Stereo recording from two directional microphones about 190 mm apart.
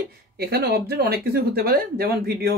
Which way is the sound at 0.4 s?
55° right (ahead or behind).